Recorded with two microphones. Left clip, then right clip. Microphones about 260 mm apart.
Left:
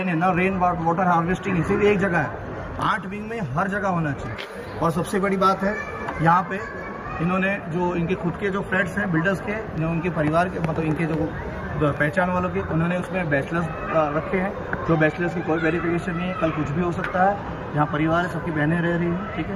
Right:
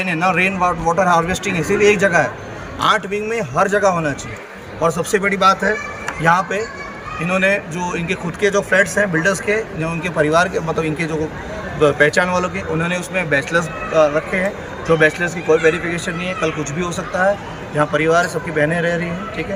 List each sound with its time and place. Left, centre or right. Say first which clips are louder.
0.1 s a man's voice: right 5 dB; centre
17.7 s a man's voice: right 7 dB; right